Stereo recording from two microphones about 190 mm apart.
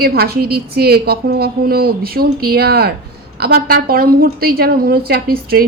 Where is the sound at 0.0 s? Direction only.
55° right (ahead or behind).